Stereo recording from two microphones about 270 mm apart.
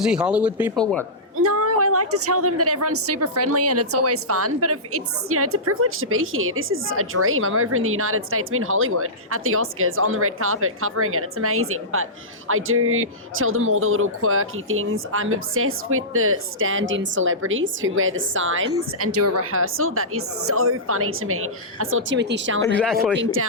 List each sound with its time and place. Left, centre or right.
0.0 s speech: centre
1.4 s a woman's voice: right
22.6 s speech: centre
23.1 s a woman's voice: right